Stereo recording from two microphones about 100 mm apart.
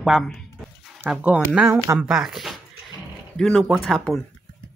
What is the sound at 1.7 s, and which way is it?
Speech, 30° right (ahead or behind).